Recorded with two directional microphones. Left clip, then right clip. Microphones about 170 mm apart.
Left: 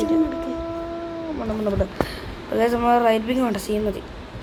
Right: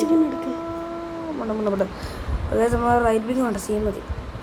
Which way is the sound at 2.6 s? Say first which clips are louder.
Left 1 dB; 15° left (ahead or behind).